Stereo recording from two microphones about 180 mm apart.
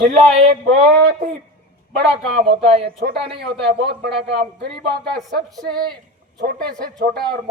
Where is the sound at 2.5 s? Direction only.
30° right (ahead or behind).